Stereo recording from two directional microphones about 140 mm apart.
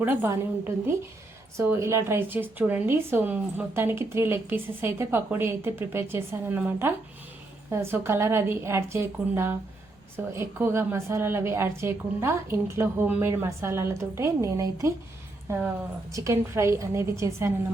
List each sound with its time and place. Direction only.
0.0 s a woman's voice: 15° right (ahead or behind)